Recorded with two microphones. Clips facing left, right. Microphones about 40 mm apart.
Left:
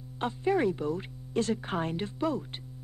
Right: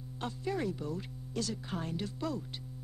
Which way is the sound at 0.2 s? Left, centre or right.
Left.